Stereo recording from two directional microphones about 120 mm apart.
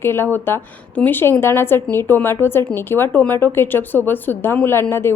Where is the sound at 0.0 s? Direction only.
20° left (ahead or behind).